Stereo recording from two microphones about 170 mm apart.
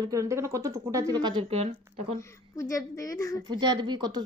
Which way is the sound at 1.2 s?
30° right (ahead or behind).